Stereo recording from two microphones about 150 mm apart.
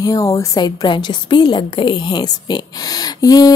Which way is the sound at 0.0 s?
20° left (ahead or behind).